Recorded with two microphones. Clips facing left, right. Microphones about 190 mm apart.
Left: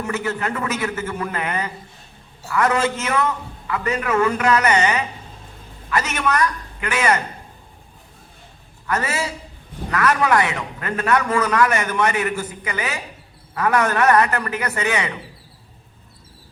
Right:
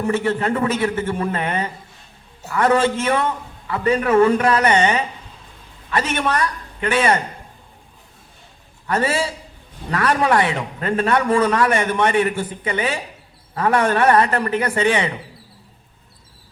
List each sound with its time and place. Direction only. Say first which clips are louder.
0.0 s a man's voice: right 5 dB; 30° right (ahead or behind)
8.9 s a man's voice: right 4 dB; 30° right (ahead or behind)